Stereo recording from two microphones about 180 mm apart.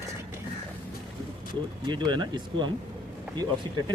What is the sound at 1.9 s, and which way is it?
Speech, 25° right (ahead or behind).